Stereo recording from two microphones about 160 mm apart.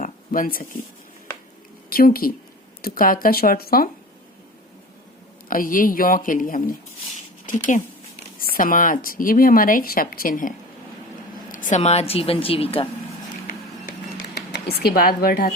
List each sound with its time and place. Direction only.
0.0 s a sound: 60° left (ahead or behind)
1.9 s speech: 65° left (ahead or behind)
5.5 s speech: 60° left (ahead or behind)
11.5 s a woman's voice: 50° left (ahead or behind)
14.3 s speech: 85° left; by 15.4 s 65° left (ahead or behind)